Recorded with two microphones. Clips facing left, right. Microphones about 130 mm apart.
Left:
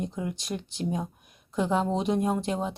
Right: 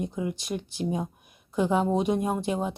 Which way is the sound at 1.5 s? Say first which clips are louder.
Right 2 dB; 5° right (ahead or behind).